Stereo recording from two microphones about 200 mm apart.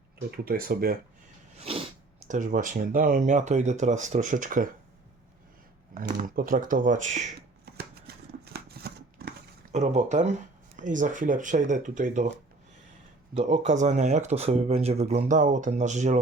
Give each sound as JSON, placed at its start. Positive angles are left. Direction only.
{"t": 0.3, "sound": "speech", "side_deg": -50}
{"t": 1.5, "sound": "a sound", "side_deg": -30}
{"t": 2.2, "sound": "speech", "side_deg": -40}
{"t": 5.9, "sound": "speech", "side_deg": -40}
{"t": 7.6, "sound": "shuffling cards", "side_deg": -55}
{"t": 9.7, "sound": "speech", "side_deg": -35}
{"t": 13.3, "sound": "speech", "side_deg": -30}